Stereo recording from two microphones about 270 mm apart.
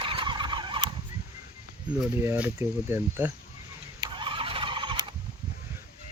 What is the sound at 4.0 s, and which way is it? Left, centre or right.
Turkey, centre.